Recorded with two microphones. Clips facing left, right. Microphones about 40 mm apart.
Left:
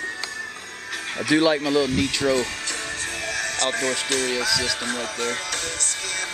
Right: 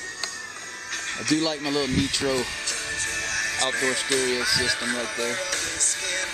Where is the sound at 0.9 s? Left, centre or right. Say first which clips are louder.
Left 4 dB; centre.